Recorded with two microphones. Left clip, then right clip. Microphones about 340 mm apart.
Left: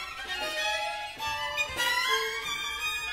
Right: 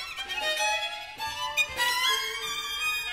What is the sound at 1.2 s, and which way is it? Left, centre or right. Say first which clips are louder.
Music: right 3 dB; centre.